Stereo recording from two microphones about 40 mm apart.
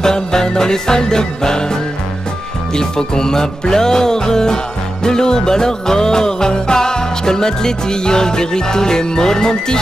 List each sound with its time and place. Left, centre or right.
0.0 s music: centre